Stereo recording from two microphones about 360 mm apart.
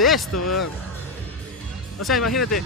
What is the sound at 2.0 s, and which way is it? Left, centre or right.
Speech, centre.